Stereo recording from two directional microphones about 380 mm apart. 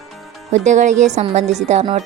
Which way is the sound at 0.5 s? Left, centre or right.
Centre.